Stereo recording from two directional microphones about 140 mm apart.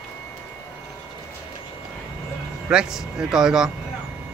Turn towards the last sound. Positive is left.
turn(degrees=-5)  # may be behind; listen again after turning